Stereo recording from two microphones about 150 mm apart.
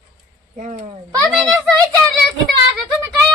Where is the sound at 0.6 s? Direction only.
50° right (ahead or behind).